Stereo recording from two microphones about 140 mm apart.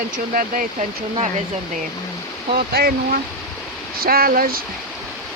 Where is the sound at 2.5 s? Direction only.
90° right.